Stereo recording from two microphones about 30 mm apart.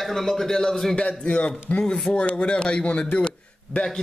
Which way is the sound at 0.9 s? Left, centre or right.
Left.